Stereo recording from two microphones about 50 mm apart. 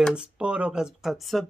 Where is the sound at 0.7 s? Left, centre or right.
Centre.